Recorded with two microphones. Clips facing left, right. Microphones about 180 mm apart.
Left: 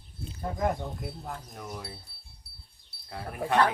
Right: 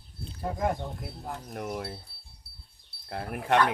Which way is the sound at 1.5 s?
55° right (ahead or behind).